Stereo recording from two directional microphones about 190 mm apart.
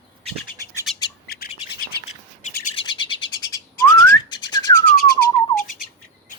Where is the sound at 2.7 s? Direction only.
25° left (ahead or behind).